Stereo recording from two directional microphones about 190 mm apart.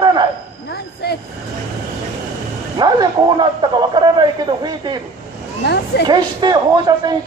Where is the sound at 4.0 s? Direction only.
20° right (ahead or behind).